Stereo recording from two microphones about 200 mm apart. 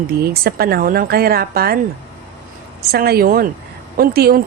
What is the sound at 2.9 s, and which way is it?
Speech, 50° right (ahead or behind).